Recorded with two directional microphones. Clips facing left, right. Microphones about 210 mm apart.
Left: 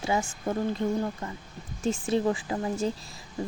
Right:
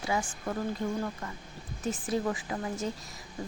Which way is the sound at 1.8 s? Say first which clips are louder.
Left 5 dB; 25° left (ahead or behind).